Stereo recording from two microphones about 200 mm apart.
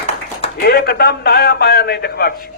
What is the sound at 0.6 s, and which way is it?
A man's voice, 50° left (ahead or behind).